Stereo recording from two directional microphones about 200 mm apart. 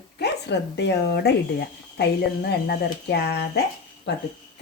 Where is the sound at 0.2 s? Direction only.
55° left (ahead or behind).